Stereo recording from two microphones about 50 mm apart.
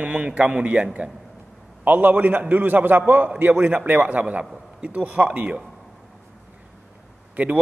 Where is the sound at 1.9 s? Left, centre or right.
Right.